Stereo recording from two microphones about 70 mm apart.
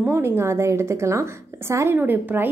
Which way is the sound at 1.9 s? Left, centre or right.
Right.